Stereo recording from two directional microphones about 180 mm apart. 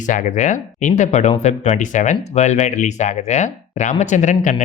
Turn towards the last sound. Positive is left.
turn(degrees=40)  # may be behind; listen again after turning